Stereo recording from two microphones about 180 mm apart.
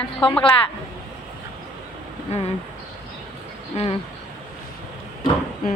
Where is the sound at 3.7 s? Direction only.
35° left (ahead or behind).